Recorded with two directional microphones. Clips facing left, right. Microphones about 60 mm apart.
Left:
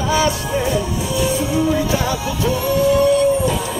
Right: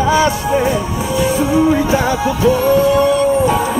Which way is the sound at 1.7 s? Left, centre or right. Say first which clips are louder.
Right 5 dB; right.